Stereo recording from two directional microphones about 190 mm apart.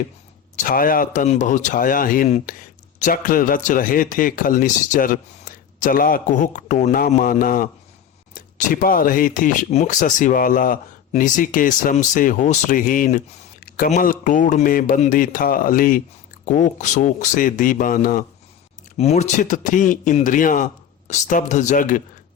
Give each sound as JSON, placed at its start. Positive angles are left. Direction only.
{"t": 0.5, "sound": "speech", "side_deg": 45}
{"t": 18.9, "sound": "speech", "side_deg": 35}